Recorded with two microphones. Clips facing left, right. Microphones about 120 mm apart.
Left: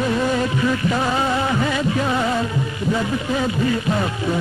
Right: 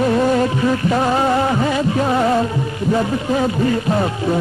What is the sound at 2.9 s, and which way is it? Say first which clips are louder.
Speech: right 5 dB; 40° right (ahead or behind).